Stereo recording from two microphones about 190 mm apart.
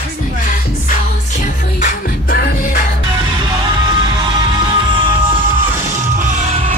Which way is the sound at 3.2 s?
20° right (ahead or behind).